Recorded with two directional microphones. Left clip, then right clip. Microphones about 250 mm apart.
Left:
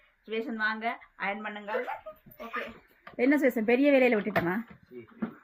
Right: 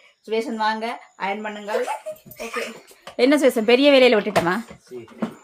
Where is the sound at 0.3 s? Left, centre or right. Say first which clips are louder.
Right 9 dB; centre.